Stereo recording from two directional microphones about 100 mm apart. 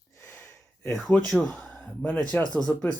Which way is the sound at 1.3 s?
Centre (ahead or behind).